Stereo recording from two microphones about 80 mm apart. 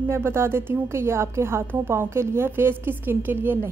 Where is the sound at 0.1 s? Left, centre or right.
Right.